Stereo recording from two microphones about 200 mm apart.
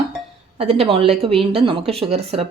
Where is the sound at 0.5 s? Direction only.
30° right (ahead or behind).